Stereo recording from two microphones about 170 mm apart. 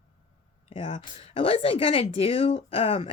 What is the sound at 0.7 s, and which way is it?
Speech, 30° left (ahead or behind).